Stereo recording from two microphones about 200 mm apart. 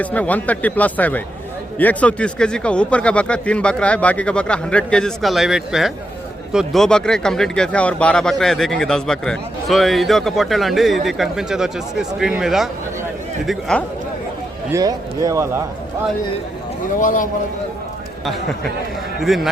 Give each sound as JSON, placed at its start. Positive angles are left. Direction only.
{"t": 0.0, "sound": "speech", "side_deg": 5}
{"t": 14.7, "sound": "speech", "side_deg": -15}
{"t": 17.0, "sound": "a man's voice", "side_deg": 40}
{"t": 19.2, "sound": "speech", "side_deg": 0}